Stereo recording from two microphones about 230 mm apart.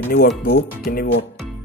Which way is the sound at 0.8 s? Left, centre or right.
Left.